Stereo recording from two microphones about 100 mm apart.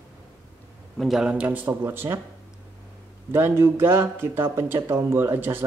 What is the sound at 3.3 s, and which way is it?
Speech, 25° right (ahead or behind).